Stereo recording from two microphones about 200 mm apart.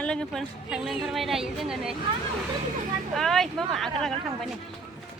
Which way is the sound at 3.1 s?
Centre (ahead or behind).